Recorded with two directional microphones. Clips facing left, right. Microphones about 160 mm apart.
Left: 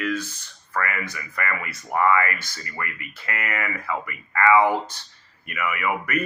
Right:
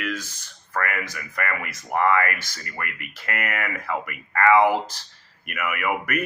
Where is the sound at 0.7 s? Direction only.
45° right (ahead or behind).